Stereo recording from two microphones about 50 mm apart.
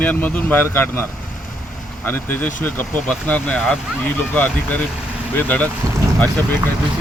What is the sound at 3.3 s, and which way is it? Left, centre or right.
Speech, left.